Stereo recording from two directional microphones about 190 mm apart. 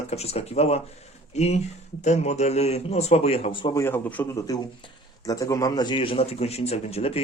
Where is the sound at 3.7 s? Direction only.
10° left (ahead or behind).